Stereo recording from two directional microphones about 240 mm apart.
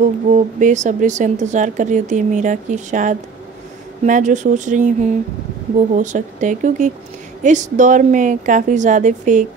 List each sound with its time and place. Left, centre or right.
0.0 s speech: right